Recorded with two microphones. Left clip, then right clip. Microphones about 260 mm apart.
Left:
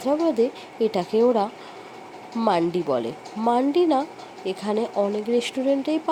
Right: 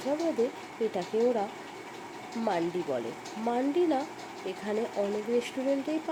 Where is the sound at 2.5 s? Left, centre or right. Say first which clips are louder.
Left 9 dB; left.